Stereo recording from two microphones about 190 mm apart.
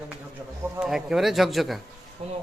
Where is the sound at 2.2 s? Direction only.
30° right (ahead or behind).